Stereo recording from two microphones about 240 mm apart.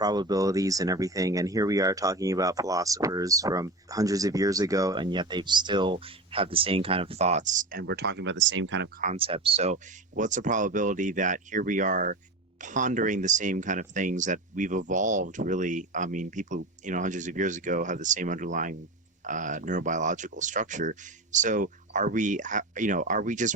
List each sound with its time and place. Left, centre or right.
0.0 s speech: centre; by 8.9 s right
9.0 s speech: right